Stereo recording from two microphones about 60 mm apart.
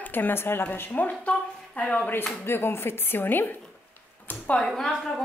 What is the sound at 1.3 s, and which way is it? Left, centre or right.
Speech, centre.